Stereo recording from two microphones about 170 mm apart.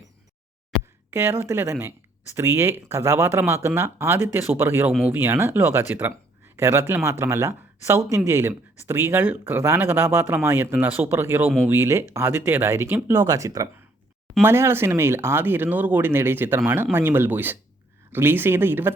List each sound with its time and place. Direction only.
1.1 s speech: 15° right (ahead or behind)